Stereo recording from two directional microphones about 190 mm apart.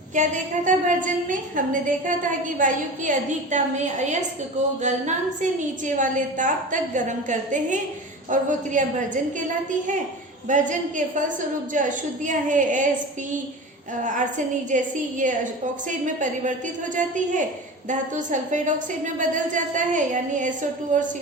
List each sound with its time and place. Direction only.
0.1 s a woman's voice: 40° right (ahead or behind)
10.5 s a woman's voice: 40° right (ahead or behind)
14.0 s a woman's voice: 40° right (ahead or behind)
16.9 s a woman's voice: 40° right (ahead or behind)